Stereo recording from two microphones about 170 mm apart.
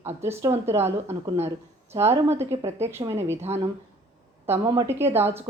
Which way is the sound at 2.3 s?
15° right (ahead or behind).